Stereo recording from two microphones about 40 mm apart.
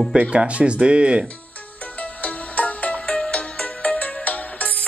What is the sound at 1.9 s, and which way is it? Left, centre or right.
Music, left.